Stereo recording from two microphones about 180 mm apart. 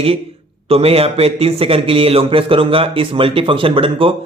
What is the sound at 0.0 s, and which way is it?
A man's voice, 35° right (ahead or behind).